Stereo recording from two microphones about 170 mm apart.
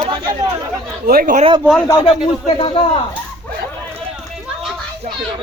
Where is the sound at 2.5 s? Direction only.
30° left (ahead or behind).